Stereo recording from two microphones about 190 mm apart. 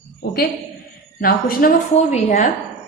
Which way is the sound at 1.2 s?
50° left (ahead or behind).